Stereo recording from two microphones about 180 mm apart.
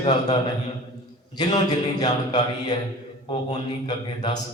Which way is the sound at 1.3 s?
20° left (ahead or behind).